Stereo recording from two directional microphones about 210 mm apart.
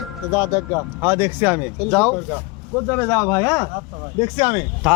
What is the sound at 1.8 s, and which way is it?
Music, 5° left (ahead or behind).